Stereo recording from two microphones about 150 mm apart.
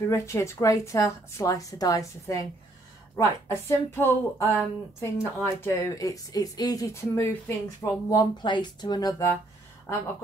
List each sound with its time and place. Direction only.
0.0 s a woman's voice: 20° left (ahead or behind)